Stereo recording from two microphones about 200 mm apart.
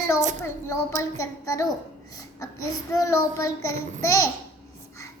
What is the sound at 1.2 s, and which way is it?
Child singing, 15° left (ahead or behind).